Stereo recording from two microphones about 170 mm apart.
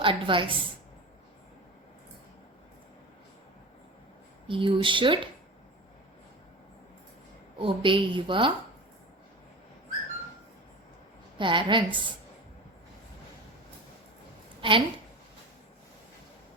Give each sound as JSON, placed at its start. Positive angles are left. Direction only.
{"t": 0.0, "sound": "a woman's voice", "side_deg": -30}
{"t": 4.4, "sound": "a woman's voice", "side_deg": -30}
{"t": 7.6, "sound": "a woman's voice", "side_deg": -30}
{"t": 11.3, "sound": "a woman's voice", "side_deg": -30}
{"t": 14.6, "sound": "a woman's voice", "side_deg": -30}